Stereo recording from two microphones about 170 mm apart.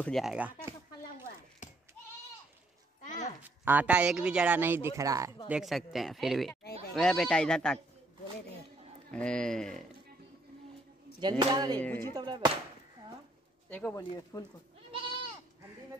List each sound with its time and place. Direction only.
0.0 s speech: centre (ahead or behind)
1.6 s goat: 45° left (ahead or behind)
3.0 s a sound: 45° left (ahead or behind)
3.4 s speech: 10° right (ahead or behind)
5.5 s speech: centre (ahead or behind)
9.1 s speech: 5° left (ahead or behind)
11.1 s speech: 25° right (ahead or behind)
11.8 s speech: 10° left (ahead or behind)
12.1 s speech: 25° right (ahead or behind)
13.7 s speech: 10° left (ahead or behind)
14.3 s speech: 20° left (ahead or behind)